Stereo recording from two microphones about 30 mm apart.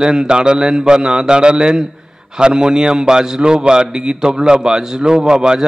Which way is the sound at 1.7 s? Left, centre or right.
Centre.